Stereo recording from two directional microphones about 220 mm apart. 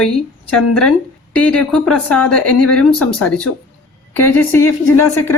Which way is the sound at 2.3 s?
90° left.